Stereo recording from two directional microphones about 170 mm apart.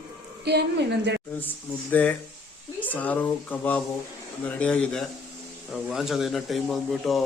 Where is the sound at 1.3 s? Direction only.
10° left (ahead or behind).